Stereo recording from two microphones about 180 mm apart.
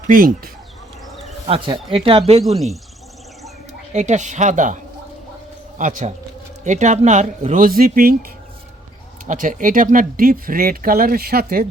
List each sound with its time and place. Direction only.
0.1 s speech: 50° right (ahead or behind)
1.5 s speech: 30° right (ahead or behind)
3.9 s a man's voice: 40° right (ahead or behind)
9.2 s speech: 45° right (ahead or behind)